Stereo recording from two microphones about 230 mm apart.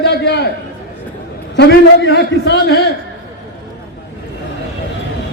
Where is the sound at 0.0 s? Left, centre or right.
Left.